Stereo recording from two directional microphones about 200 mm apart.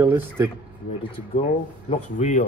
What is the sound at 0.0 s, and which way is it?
Speech, 10° right (ahead or behind).